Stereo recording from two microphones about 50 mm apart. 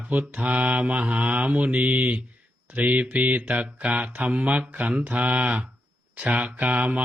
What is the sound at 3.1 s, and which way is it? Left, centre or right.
Speech, right.